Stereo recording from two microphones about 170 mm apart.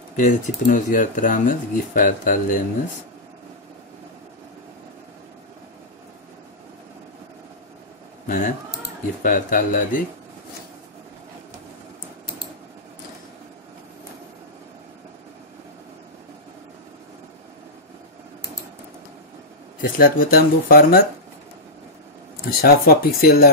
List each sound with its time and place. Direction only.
0.1 s speech: 50° left (ahead or behind)
8.3 s speech: 50° left (ahead or behind)
19.8 s speech: 60° left (ahead or behind)
22.6 s speech: 65° left (ahead or behind)